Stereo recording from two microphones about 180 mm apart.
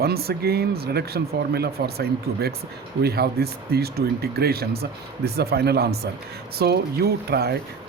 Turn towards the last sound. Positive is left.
turn(degrees=-60)  # may be behind; listen again after turning